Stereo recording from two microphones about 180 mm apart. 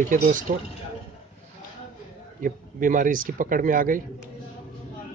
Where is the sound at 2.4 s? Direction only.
50° right (ahead or behind).